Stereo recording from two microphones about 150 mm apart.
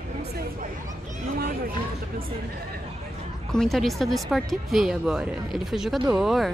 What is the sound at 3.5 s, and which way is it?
Speech, centre (ahead or behind).